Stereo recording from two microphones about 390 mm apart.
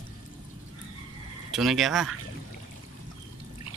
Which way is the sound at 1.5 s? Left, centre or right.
Centre.